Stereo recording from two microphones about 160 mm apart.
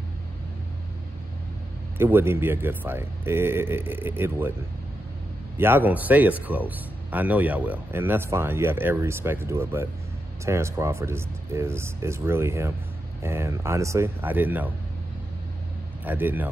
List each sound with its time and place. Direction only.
2.0 s speech: 15° right (ahead or behind)
5.6 s speech: 10° right (ahead or behind)
16.0 s a man's voice: 10° right (ahead or behind)